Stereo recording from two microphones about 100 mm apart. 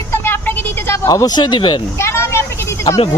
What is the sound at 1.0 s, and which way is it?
Speech, 40° left (ahead or behind).